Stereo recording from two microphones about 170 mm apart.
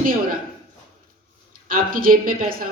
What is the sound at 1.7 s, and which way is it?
Speech, 55° right (ahead or behind).